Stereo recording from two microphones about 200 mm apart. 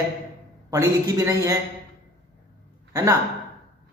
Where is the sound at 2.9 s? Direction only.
15° right (ahead or behind).